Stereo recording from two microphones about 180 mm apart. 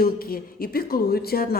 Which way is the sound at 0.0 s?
55° left (ahead or behind).